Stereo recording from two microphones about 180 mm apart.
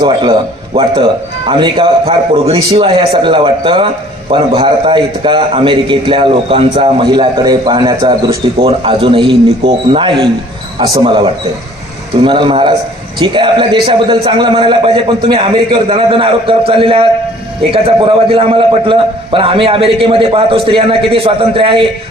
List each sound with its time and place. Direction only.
0.0 s a man's voice: 25° right (ahead or behind)
8.5 s a man's voice: 30° right (ahead or behind)